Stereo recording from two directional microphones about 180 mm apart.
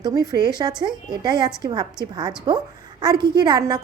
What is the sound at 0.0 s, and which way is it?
A woman's voice, 20° right (ahead or behind).